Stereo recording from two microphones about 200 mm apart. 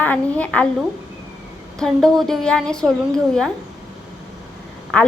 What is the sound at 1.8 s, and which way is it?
Speech, centre (ahead or behind).